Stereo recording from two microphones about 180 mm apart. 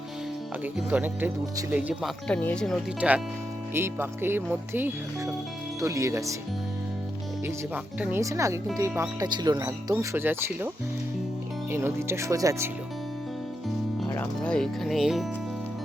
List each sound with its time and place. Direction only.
0.6 s speech: 10° right (ahead or behind)
7.9 s speech: 10° right (ahead or behind)
11.7 s speech: 15° right (ahead or behind)
14.1 s speech: 10° left (ahead or behind)